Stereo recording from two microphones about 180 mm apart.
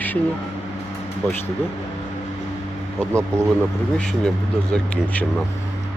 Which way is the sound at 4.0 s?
5° left (ahead or behind).